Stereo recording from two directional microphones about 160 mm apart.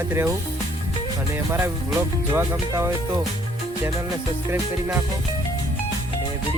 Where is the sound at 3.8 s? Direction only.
15° right (ahead or behind).